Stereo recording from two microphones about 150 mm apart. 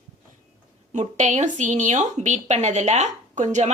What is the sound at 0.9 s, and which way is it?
A woman's voice, 50° right (ahead or behind).